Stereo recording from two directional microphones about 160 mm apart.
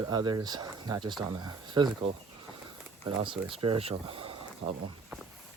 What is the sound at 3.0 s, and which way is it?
Speech, 30° right (ahead or behind).